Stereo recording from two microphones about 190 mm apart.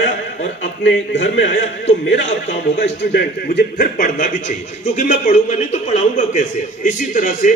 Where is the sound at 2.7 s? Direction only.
60° left (ahead or behind).